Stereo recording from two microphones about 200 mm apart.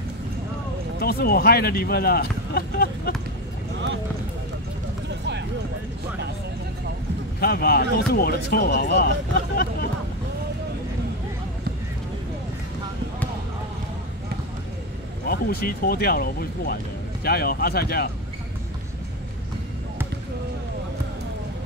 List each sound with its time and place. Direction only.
1.0 s speech: 50° left (ahead or behind)
7.3 s speech: 50° left (ahead or behind)
15.2 s speech: 50° left (ahead or behind)